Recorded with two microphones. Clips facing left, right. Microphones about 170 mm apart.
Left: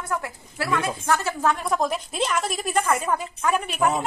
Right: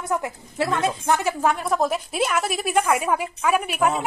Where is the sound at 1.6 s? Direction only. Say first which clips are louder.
Right 2 dB; 5° right (ahead or behind).